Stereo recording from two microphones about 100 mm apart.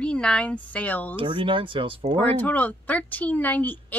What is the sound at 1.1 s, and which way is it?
Speech, 55° right (ahead or behind).